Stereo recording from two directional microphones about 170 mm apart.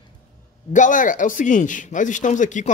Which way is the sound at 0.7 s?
50° left (ahead or behind).